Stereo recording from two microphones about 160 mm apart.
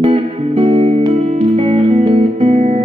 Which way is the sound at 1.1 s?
50° right (ahead or behind).